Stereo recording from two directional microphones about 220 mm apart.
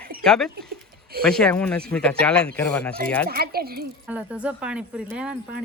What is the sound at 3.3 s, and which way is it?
Speech, 45° right (ahead or behind).